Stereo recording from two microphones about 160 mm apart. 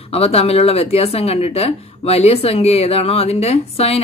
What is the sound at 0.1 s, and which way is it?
Speech, 40° left (ahead or behind).